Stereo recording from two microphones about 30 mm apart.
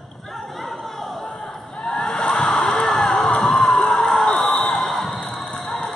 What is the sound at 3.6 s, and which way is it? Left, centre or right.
Crowd, left.